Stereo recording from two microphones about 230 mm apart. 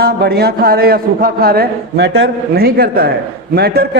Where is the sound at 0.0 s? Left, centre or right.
Right.